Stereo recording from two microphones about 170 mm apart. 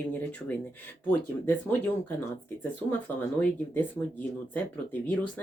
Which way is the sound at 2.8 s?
25° right (ahead or behind).